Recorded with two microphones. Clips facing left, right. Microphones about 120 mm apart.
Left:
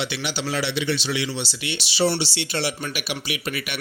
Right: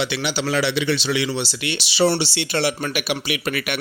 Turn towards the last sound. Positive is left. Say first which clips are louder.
# right 5 dB
turn(degrees=-60)  # may be behind; listen again after turning